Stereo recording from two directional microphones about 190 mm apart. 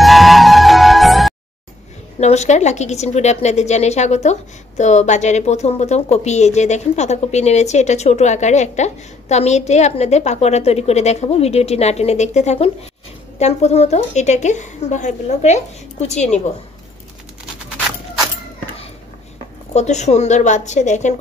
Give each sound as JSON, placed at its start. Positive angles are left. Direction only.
{"t": 0.0, "sound": "music", "side_deg": 0}
{"t": 2.1, "sound": "a woman's voice", "side_deg": 35}
{"t": 19.7, "sound": "a woman's voice", "side_deg": 35}